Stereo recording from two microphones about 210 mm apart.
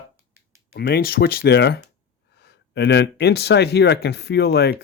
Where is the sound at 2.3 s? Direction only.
55° left (ahead or behind).